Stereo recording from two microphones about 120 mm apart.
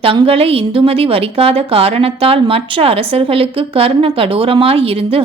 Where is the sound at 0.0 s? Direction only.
50° right (ahead or behind).